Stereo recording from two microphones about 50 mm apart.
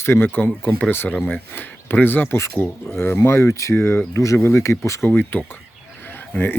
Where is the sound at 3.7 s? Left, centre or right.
Left.